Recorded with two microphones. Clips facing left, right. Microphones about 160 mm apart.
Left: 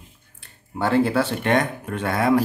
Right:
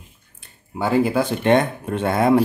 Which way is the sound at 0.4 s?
10° right (ahead or behind).